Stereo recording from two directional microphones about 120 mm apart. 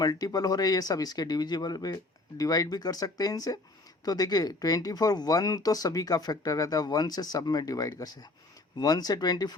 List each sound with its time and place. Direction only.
0.0 s speech: 30° left (ahead or behind)